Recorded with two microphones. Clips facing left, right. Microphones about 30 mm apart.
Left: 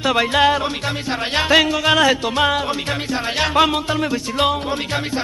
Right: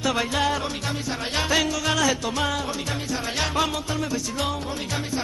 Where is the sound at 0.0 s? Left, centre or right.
Left.